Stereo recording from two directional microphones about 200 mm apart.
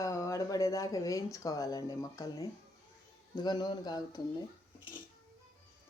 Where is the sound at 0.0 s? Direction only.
15° left (ahead or behind).